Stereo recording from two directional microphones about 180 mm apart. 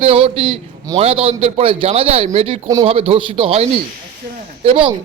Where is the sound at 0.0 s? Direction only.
30° right (ahead or behind).